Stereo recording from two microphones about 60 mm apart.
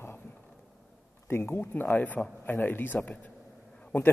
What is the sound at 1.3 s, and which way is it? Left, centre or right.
A man's voice, left.